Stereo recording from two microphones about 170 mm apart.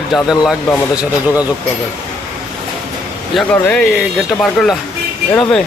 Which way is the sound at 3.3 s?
5° left (ahead or behind).